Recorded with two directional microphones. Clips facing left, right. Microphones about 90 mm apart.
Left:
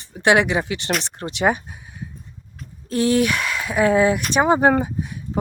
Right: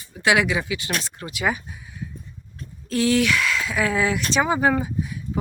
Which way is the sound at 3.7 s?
35° left (ahead or behind).